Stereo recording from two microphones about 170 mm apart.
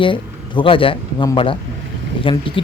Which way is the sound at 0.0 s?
30° left (ahead or behind).